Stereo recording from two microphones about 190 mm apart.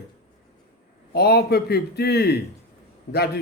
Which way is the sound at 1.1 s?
55° left (ahead or behind).